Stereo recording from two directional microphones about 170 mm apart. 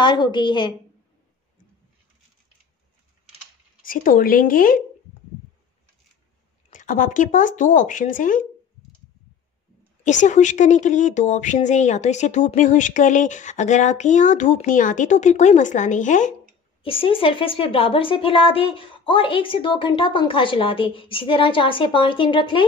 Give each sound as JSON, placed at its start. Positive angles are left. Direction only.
{"t": 0.0, "sound": "a woman's voice", "side_deg": 25}
{"t": 3.8, "sound": "speech", "side_deg": 55}
{"t": 6.7, "sound": "a woman's voice", "side_deg": 50}
{"t": 10.0, "sound": "a woman's voice", "side_deg": 45}
{"t": 16.8, "sound": "a woman's voice", "side_deg": 30}